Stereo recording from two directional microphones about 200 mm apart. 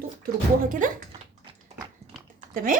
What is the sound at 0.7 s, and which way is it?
Speech, 40° right (ahead or behind).